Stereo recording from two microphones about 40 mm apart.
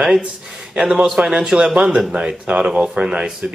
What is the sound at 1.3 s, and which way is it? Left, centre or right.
Speech, centre.